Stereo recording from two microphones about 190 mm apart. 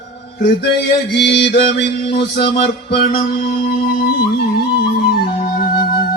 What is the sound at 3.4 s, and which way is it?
Music, 25° left (ahead or behind).